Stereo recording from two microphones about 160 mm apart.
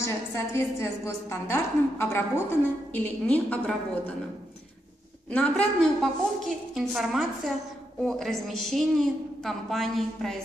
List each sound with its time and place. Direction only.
0.0 s a woman's voice: 15° left (ahead or behind)
5.3 s a woman's voice: 5° left (ahead or behind)